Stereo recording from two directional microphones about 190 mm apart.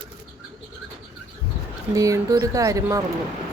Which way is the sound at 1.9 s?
15° right (ahead or behind).